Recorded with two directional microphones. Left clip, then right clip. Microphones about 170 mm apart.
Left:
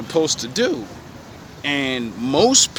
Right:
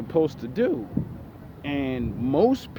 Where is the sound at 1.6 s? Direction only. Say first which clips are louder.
Left 7 dB; 20° left (ahead or behind).